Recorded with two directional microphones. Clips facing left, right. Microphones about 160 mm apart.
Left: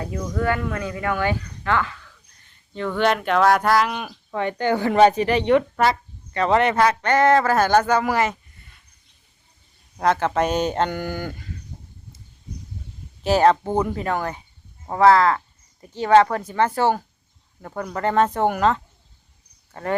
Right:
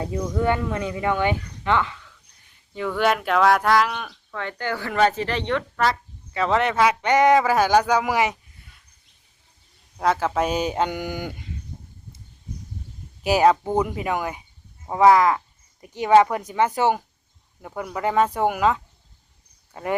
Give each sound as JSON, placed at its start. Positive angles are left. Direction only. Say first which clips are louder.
{"t": 0.3, "sound": "speech", "louder": "even", "side_deg": -20}
{"t": 2.7, "sound": "speech", "louder": "left 1 dB", "side_deg": -5}
{"t": 4.1, "sound": "speech", "louder": "left 7 dB", "side_deg": 20}
{"t": 5.8, "sound": "speech", "louder": "left 3 dB", "side_deg": 0}
{"t": 7.0, "sound": "speech", "louder": "right 2 dB", "side_deg": -15}
{"t": 10.0, "sound": "speech", "louder": "left 2 dB", "side_deg": -5}
{"t": 13.2, "sound": "speech", "louder": "left 1 dB", "side_deg": -10}